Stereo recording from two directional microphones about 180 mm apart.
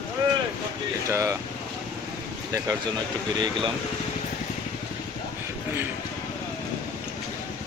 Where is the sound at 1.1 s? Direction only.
15° right (ahead or behind).